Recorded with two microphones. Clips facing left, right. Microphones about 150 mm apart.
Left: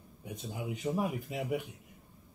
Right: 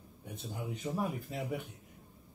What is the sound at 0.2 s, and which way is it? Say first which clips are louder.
A man's voice: left 2 dB; 5° left (ahead or behind).